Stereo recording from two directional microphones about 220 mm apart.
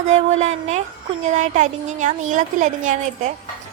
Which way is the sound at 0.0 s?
30° right (ahead or behind).